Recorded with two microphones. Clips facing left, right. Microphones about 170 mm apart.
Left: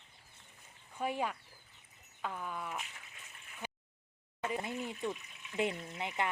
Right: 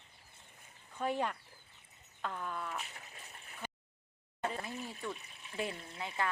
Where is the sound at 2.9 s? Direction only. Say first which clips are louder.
Right 3 dB; 35° right (ahead or behind).